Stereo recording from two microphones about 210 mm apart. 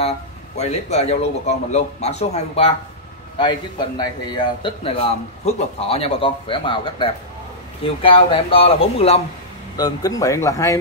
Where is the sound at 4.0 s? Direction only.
20° left (ahead or behind).